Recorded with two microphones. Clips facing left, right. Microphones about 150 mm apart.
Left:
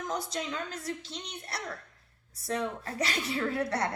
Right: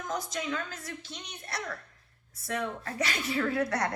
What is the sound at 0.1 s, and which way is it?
A woman's voice, 30° left (ahead or behind).